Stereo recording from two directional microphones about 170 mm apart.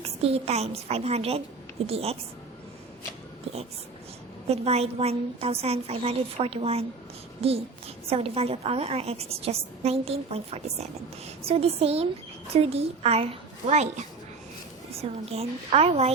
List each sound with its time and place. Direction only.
0.0 s a woman's voice: 35° right (ahead or behind)
4.4 s a woman's voice: 35° right (ahead or behind)